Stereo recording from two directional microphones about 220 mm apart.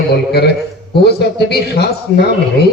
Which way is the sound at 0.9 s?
45° left (ahead or behind).